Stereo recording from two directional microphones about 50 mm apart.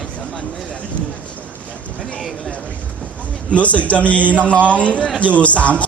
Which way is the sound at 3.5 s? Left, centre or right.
Left.